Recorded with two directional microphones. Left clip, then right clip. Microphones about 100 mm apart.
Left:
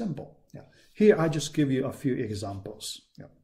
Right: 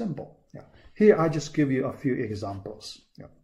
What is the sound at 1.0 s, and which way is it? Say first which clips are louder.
Speech: right 2 dB; 35° left (ahead or behind).